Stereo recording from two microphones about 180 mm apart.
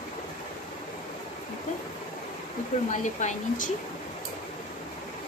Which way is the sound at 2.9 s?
40° left (ahead or behind).